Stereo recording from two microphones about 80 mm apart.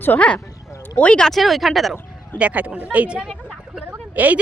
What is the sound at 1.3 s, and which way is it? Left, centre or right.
Speech, centre.